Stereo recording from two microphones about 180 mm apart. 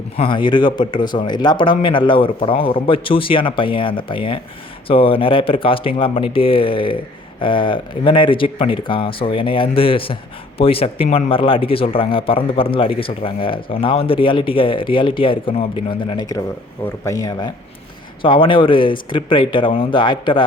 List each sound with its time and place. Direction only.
0.2 s speech: 25° left (ahead or behind)